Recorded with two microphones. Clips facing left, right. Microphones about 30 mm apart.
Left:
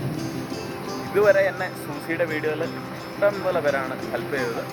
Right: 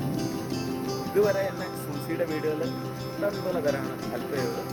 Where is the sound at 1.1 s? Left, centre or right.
Left.